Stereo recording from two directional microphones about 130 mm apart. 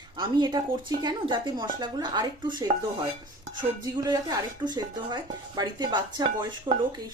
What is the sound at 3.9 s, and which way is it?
Speech, 30° right (ahead or behind).